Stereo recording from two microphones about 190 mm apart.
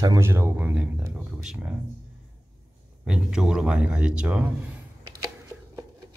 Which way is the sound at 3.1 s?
5° right (ahead or behind).